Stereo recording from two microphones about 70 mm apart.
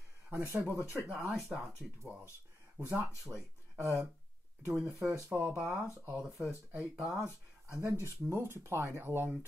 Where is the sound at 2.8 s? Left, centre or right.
Right.